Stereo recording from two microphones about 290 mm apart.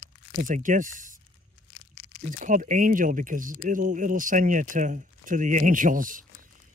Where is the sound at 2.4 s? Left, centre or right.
Right.